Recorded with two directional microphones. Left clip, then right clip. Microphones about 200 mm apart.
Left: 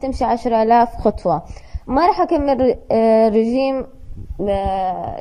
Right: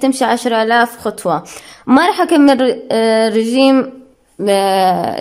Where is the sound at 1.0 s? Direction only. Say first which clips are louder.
Right 1 dB; 10° right (ahead or behind).